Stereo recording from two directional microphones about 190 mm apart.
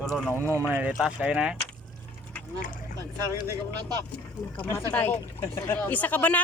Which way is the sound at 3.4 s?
15° right (ahead or behind).